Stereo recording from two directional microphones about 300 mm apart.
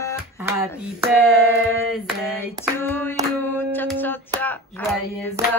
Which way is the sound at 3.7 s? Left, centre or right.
Centre.